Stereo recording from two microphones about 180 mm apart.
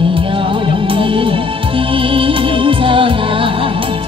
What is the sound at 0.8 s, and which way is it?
Music, 30° right (ahead or behind).